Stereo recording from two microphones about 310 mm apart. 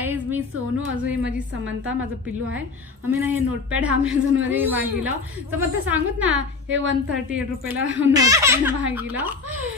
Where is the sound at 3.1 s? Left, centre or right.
Centre.